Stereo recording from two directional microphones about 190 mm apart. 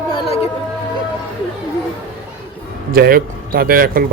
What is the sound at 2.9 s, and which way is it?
Speech, 50° right (ahead or behind).